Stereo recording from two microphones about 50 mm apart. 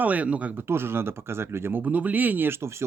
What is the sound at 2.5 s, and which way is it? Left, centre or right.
Speech, right.